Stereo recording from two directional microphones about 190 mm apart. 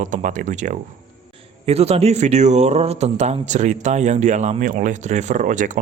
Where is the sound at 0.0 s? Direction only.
40° right (ahead or behind).